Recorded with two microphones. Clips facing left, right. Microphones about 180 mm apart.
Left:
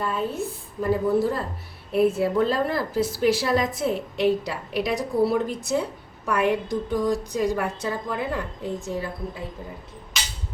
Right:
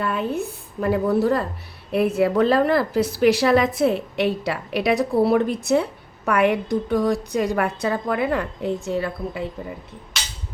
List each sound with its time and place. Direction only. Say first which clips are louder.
0.0 s a woman's voice: right 3 dB; 65° right (ahead or behind)